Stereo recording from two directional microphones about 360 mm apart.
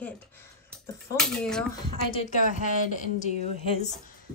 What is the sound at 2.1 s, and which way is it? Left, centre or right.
Speech, centre.